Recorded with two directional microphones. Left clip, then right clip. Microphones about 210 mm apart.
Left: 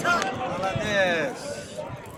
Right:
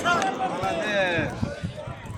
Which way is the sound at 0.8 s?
55° left (ahead or behind).